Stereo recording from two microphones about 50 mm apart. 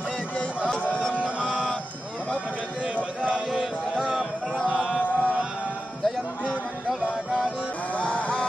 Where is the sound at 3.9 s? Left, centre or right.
Centre.